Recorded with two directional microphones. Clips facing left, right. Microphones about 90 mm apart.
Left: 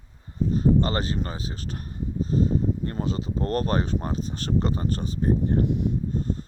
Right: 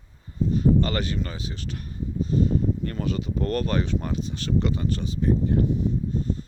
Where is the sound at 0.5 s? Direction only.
35° left (ahead or behind).